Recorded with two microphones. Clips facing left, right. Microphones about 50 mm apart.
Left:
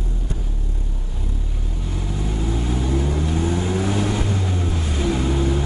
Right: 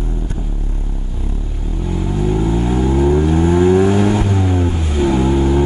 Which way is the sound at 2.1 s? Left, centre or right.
Right.